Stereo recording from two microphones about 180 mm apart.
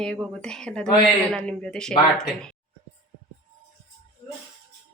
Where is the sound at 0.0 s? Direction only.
5° left (ahead or behind).